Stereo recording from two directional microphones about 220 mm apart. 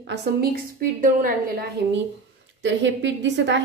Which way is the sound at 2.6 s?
55° right (ahead or behind).